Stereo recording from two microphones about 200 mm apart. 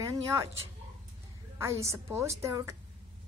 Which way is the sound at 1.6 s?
15° right (ahead or behind).